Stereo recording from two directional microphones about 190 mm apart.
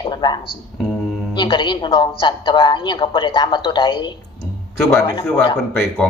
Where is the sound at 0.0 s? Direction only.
25° left (ahead or behind).